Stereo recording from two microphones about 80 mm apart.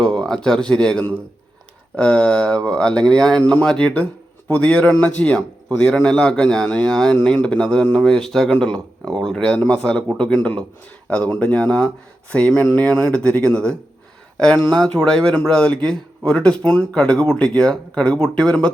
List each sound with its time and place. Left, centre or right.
0.0 s speech: centre